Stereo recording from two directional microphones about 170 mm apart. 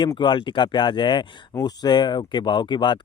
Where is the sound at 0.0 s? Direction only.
25° left (ahead or behind).